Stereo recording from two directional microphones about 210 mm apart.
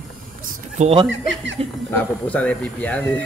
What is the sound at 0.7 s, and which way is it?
Speech, 30° right (ahead or behind).